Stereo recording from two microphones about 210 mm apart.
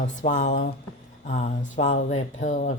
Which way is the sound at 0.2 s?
35° left (ahead or behind).